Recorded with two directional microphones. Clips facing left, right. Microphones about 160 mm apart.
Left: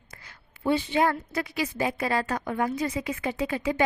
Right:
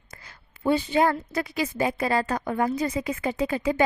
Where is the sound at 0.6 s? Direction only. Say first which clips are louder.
Right 2 dB; 45° right (ahead or behind).